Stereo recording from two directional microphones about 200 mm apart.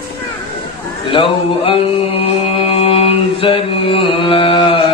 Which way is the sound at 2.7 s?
30° left (ahead or behind).